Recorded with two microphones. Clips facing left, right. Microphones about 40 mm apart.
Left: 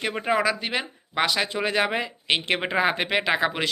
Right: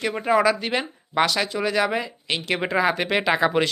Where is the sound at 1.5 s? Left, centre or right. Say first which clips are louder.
Right 2 dB; left.